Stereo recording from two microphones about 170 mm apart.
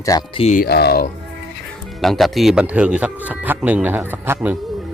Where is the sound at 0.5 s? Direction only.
65° left (ahead or behind).